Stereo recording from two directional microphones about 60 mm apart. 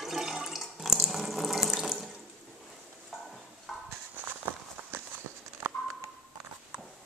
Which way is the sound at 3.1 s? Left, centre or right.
Centre.